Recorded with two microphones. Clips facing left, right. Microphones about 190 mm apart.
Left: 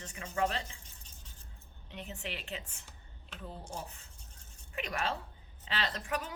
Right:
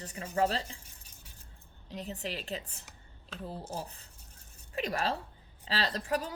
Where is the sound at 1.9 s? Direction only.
35° right (ahead or behind).